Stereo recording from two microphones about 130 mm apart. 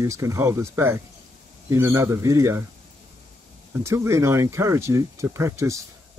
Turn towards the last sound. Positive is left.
turn(degrees=-20)  # may be behind; listen again after turning